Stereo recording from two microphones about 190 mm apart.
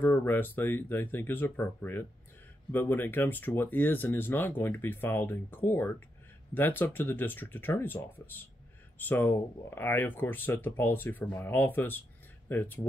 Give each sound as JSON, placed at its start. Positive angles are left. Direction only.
{"t": 0.0, "sound": "speech", "side_deg": 10}